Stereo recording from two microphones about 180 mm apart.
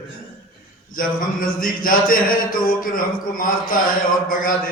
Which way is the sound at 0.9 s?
50° left (ahead or behind).